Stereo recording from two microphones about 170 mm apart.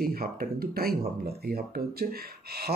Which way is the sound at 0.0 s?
60° right (ahead or behind).